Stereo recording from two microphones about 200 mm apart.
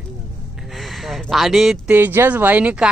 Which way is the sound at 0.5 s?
Centre (ahead or behind).